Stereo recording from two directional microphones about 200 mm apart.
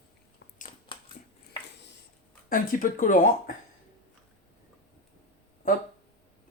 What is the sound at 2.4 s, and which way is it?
Speech, 45° left (ahead or behind).